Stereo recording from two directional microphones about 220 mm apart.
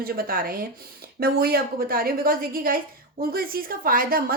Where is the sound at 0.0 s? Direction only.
40° right (ahead or behind).